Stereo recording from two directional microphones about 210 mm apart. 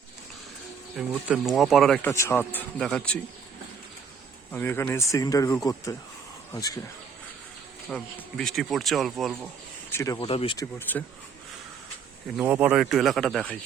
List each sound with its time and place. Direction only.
0.9 s speech: 5° right (ahead or behind)
4.5 s speech: 10° left (ahead or behind)
7.9 s speech: centre (ahead or behind)
9.9 s speech: 15° left (ahead or behind)
12.4 s speech: 5° right (ahead or behind)